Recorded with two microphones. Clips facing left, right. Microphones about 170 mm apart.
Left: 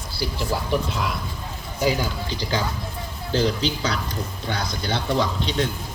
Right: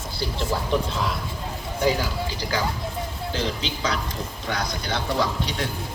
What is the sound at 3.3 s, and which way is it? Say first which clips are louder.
A man's voice: left 7 dB; 35° left (ahead or behind).